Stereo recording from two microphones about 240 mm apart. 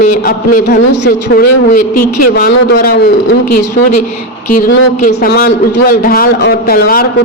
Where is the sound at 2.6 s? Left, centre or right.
Left.